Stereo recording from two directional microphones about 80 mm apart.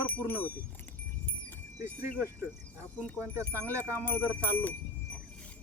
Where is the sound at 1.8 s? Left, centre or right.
Right.